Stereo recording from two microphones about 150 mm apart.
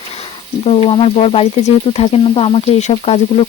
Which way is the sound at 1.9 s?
40° left (ahead or behind).